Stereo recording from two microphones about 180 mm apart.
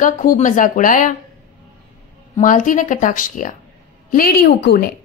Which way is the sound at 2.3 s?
45° left (ahead or behind).